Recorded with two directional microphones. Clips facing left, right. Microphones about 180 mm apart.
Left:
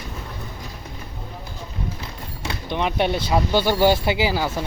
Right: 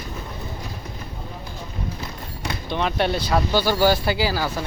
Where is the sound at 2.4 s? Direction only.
15° left (ahead or behind).